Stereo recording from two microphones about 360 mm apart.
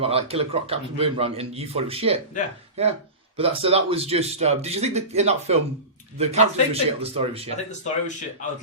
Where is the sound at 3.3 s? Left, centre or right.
Centre.